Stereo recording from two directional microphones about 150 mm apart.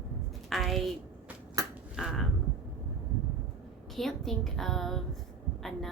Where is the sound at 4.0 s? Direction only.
Centre (ahead or behind).